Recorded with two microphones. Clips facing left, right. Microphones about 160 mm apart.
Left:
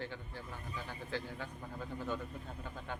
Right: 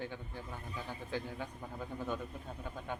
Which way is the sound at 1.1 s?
15° right (ahead or behind).